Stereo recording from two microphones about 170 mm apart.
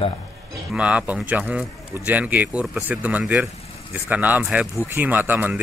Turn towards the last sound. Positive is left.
turn(degrees=-10)  # may be behind; listen again after turning